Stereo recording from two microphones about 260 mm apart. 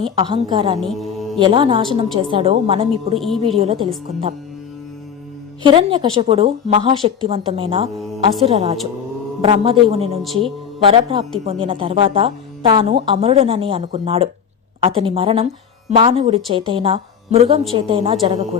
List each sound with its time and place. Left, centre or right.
0.0 s a woman's voice: centre
3.2 s a woman's voice: centre
3.6 s a woman's voice: right
5.6 s a woman's voice: centre